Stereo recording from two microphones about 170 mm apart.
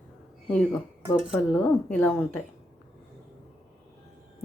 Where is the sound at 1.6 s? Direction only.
10° left (ahead or behind).